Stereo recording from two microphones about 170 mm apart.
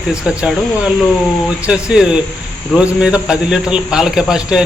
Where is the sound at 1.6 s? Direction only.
5° right (ahead or behind).